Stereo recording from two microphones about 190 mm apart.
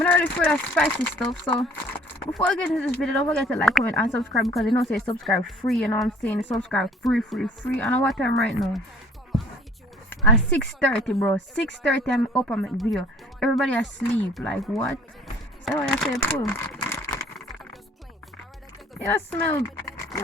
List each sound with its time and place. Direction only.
0.0 s a woman's voice: 10° left (ahead or behind)
10.3 s a woman's voice: 5° left (ahead or behind)
16.6 s crumpling: 15° left (ahead or behind)
18.9 s speech: 10° left (ahead or behind)